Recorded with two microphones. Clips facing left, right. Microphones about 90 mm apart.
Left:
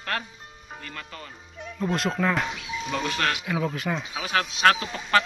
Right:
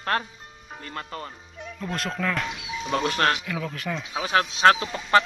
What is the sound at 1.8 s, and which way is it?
Speech, 15° left (ahead or behind).